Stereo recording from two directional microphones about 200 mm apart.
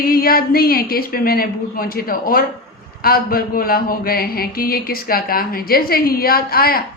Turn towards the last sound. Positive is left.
turn(degrees=50)  # may be behind; listen again after turning